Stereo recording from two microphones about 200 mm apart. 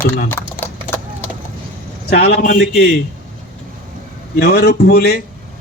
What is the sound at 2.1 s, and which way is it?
Speech, 50° left (ahead or behind).